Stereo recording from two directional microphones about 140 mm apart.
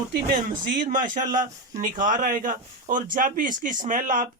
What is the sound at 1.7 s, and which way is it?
Speech, 65° right (ahead or behind).